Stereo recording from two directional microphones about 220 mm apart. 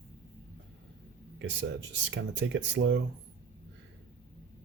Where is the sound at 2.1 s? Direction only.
50° right (ahead or behind).